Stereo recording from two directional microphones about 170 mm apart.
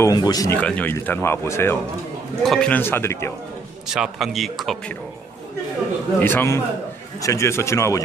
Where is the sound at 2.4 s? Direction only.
5° left (ahead or behind).